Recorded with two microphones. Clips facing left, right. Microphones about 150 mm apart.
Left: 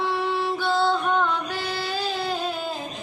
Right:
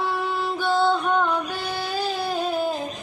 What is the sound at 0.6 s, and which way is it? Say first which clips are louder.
Music: right 3 dB; 15° right (ahead or behind).